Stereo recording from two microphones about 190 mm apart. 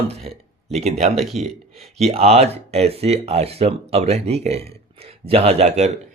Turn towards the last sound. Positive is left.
turn(degrees=-35)  # may be behind; listen again after turning